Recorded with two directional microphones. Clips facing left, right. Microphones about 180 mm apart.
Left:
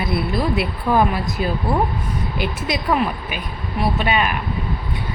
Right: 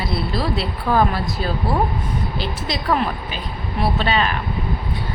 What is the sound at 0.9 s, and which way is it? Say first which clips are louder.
Speech: left 1 dB; 5° left (ahead or behind).